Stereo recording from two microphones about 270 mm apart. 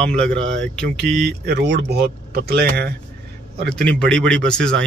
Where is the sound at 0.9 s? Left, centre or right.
Right.